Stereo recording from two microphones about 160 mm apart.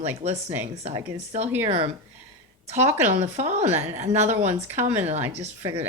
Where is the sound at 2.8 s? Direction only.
45° right (ahead or behind).